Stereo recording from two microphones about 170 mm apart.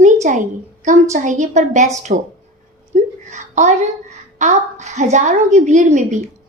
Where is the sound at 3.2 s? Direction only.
45° right (ahead or behind).